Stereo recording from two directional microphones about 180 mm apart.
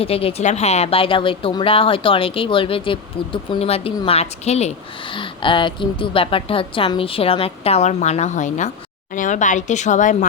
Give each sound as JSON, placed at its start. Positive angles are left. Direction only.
{"t": 0.0, "sound": "a woman's voice", "side_deg": 30}